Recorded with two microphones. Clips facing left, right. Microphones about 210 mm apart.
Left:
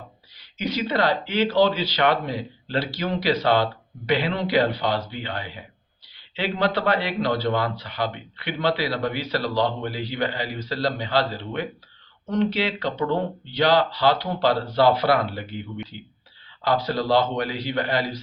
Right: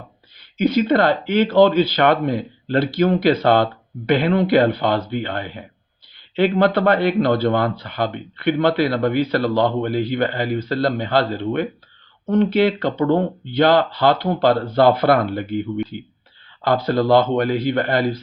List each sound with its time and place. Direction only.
0.3 s speech: 50° right (ahead or behind)